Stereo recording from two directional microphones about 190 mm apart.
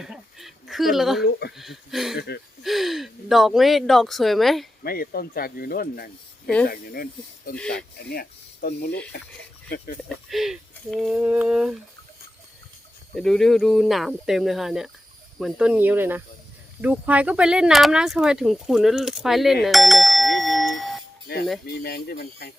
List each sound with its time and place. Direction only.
0.0 s speech: centre (ahead or behind)
2.1 s speech: 60° left (ahead or behind)
2.6 s speech: centre (ahead or behind)
4.8 s speech: 50° left (ahead or behind)
7.5 s speech: 5° left (ahead or behind)
8.1 s speech: 50° left (ahead or behind)
10.2 s speech: centre (ahead or behind)
13.1 s speech: centre (ahead or behind)
21.3 s speech: 55° left (ahead or behind)